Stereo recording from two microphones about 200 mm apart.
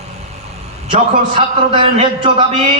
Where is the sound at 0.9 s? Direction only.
35° right (ahead or behind).